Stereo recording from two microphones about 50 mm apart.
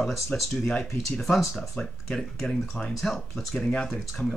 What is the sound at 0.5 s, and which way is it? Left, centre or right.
Speech, centre.